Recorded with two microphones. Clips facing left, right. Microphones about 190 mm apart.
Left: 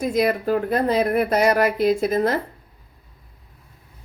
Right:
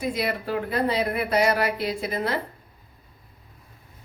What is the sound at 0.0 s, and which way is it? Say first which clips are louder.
Speech: left 7 dB; 45° left (ahead or behind).